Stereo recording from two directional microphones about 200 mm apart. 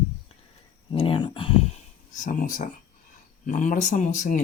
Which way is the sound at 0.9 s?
25° left (ahead or behind).